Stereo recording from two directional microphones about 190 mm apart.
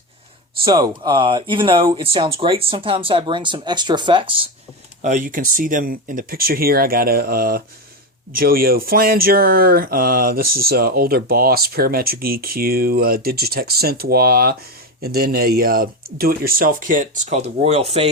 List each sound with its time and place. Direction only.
0.6 s speech: 20° right (ahead or behind)
5.0 s speech: 45° right (ahead or behind)